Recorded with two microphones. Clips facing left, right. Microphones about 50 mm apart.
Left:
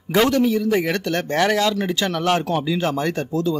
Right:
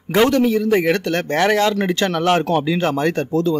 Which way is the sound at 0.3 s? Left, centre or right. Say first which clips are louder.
Right 3 dB; right.